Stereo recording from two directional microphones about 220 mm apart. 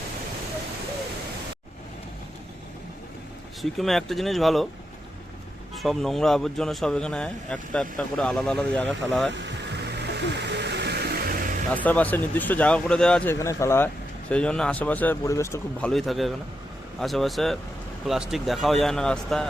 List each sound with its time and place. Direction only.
3.6 s speech: centre (ahead or behind)
5.7 s speech: centre (ahead or behind)
9.9 s music: 50° right (ahead or behind)
11.7 s speech: 5° left (ahead or behind)
15.9 s speech: centre (ahead or behind)